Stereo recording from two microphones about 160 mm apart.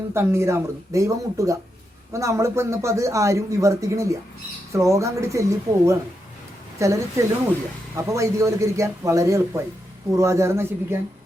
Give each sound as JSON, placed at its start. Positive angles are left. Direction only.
{"t": 0.1, "sound": "a man's voice", "side_deg": -15}